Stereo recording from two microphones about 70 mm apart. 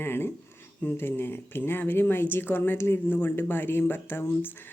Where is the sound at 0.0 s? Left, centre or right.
Left.